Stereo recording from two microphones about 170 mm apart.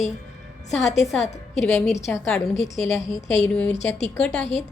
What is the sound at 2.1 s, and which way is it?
Speech, 5° left (ahead or behind).